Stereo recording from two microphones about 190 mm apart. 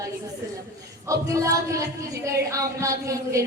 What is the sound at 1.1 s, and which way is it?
A woman's voice, 15° right (ahead or behind).